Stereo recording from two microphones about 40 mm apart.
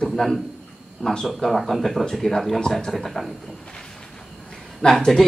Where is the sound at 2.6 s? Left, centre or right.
Centre.